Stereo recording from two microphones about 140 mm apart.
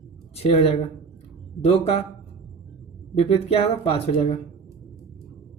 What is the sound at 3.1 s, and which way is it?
Speech, 45° left (ahead or behind).